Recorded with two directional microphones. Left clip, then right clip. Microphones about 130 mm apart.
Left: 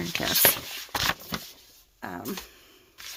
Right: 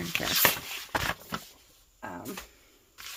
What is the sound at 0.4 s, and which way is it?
Speech, 35° right (ahead or behind).